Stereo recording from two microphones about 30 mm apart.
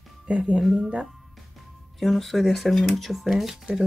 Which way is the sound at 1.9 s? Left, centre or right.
Centre.